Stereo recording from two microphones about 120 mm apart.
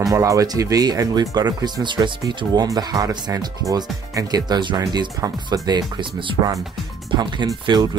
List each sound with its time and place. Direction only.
0.1 s speech: 25° right (ahead or behind)